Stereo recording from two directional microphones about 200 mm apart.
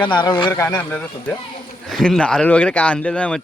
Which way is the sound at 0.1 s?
20° left (ahead or behind).